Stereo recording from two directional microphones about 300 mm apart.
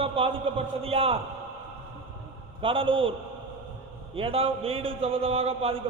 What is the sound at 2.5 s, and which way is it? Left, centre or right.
A man's voice, centre.